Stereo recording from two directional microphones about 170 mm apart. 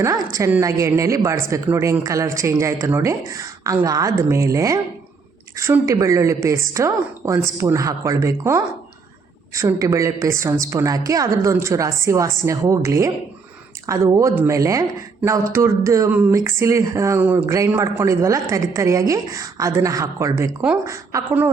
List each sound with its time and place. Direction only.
0.0 s speech: 20° right (ahead or behind)